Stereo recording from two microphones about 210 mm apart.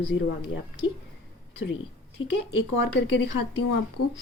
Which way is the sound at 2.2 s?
65° left (ahead or behind).